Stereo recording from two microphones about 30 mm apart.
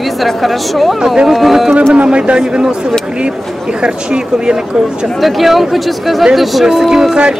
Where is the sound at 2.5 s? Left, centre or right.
Right.